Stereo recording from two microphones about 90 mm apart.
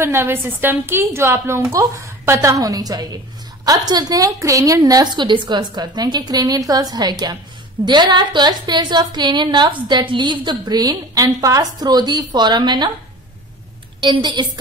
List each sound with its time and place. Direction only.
0.0 s a woman's voice: 30° right (ahead or behind); by 12.9 s 55° right (ahead or behind)
14.0 s a woman's voice: 65° right (ahead or behind)